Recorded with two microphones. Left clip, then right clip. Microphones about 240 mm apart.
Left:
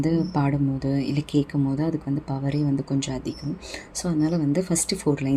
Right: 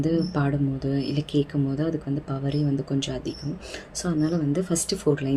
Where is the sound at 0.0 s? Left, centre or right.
Left.